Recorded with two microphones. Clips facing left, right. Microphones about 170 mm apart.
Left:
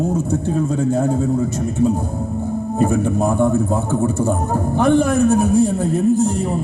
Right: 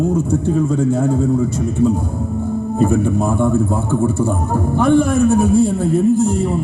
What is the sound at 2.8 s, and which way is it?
A man's voice, 45° left (ahead or behind).